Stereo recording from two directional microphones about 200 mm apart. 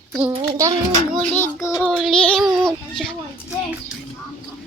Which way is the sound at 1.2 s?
10° left (ahead or behind).